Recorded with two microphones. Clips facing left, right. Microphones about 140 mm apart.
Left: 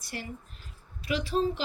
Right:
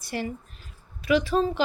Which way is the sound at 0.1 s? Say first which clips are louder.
Right 9 dB; 90° right.